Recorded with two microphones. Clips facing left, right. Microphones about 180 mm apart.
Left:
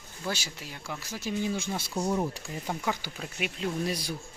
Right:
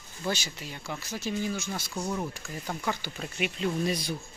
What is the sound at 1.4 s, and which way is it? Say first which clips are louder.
Speech: left 1 dB; 25° left (ahead or behind).